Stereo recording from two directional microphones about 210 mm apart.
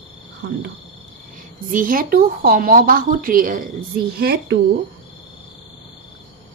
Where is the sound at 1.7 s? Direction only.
40° right (ahead or behind).